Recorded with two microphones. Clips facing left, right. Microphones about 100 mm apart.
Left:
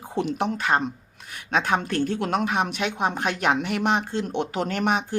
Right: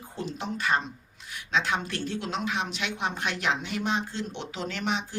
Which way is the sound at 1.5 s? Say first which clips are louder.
Left 5 dB; 50° left (ahead or behind).